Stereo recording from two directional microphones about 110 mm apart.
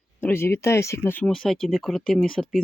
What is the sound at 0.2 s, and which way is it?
Speech, 20° left (ahead or behind).